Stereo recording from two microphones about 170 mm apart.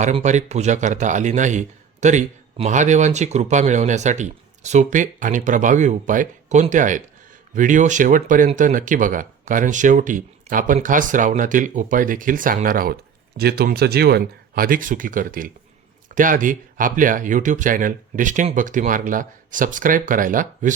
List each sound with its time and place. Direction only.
0.0 s speech: 45° right (ahead or behind)